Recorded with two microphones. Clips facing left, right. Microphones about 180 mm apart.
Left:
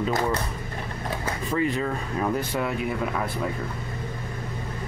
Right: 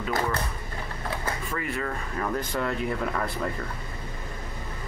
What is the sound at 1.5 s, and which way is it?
Speech, 20° left (ahead or behind).